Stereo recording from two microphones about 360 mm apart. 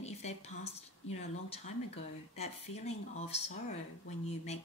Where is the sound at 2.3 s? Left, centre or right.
Centre.